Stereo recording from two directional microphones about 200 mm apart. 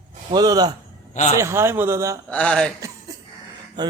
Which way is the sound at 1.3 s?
15° right (ahead or behind).